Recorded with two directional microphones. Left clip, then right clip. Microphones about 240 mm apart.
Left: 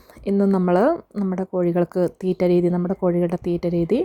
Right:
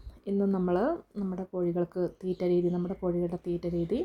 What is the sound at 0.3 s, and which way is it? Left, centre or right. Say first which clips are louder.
A woman's voice: left 9 dB; left.